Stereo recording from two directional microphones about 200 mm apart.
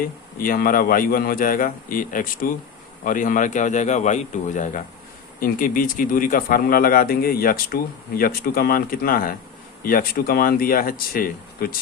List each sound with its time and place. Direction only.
0.0 s a man's voice: 45° left (ahead or behind)